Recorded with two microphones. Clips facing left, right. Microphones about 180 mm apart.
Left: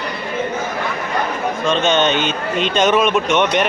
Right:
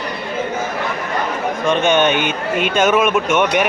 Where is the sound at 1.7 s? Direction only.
10° right (ahead or behind).